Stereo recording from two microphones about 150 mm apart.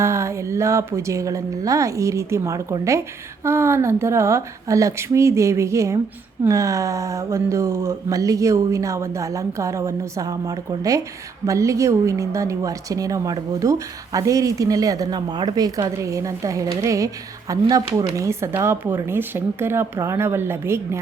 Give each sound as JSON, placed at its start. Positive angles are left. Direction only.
{"t": 0.0, "sound": "speech", "side_deg": -20}